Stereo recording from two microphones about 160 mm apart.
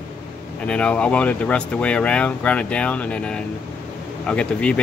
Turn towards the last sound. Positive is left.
turn(degrees=5)  # may be behind; listen again after turning